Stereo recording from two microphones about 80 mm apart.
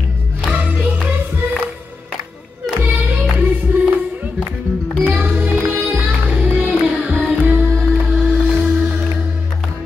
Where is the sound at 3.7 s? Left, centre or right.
Right.